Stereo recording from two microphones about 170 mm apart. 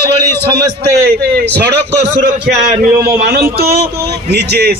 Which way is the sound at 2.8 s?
60° right (ahead or behind).